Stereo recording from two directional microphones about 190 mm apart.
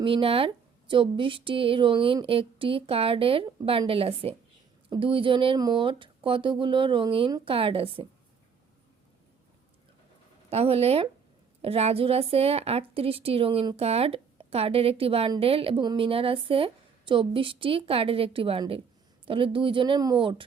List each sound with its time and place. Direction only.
0.0 s a woman's voice: 30° right (ahead or behind)
10.5 s a woman's voice: 30° right (ahead or behind)